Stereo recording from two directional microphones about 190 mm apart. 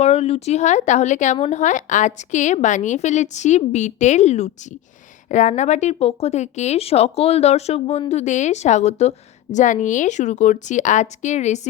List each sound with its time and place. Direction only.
0.0 s speech: 35° left (ahead or behind)